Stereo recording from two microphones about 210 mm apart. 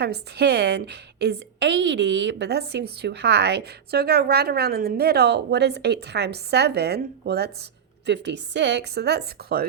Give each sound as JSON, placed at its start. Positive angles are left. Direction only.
{"t": 0.0, "sound": "a woman's voice", "side_deg": -50}